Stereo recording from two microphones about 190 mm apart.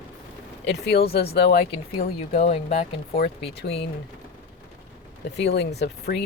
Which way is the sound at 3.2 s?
60° left (ahead or behind).